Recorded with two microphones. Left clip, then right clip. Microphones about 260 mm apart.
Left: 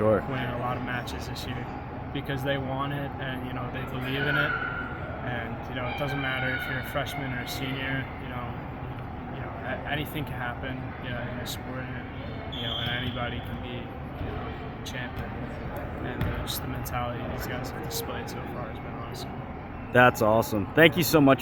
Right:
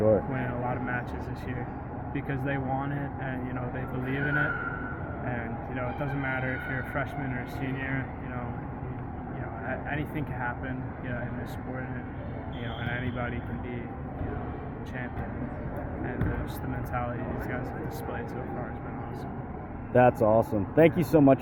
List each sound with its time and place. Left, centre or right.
0.0 s speech: left
2.5 s speech: left
6.2 s speech: left
7.6 s speech: left
12.8 s speech: left
19.9 s speech: left